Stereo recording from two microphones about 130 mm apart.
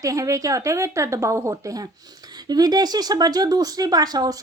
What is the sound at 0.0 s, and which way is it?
Speech, 25° right (ahead or behind).